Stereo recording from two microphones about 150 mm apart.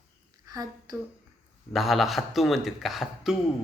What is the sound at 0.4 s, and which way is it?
Speech, 25° right (ahead or behind).